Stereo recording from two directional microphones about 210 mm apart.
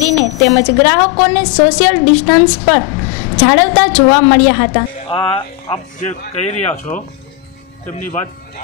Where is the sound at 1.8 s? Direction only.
10° left (ahead or behind).